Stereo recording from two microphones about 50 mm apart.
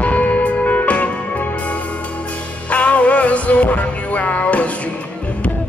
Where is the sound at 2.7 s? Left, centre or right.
Left.